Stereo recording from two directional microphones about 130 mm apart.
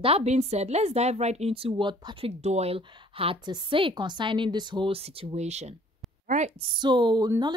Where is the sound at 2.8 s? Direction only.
40° right (ahead or behind); by 6.5 s 70° right (ahead or behind).